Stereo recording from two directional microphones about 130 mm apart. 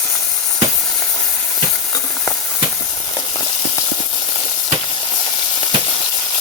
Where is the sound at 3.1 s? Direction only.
35° left (ahead or behind).